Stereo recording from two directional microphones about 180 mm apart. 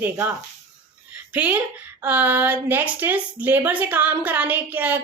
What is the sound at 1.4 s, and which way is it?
A woman's voice, 10° right (ahead or behind).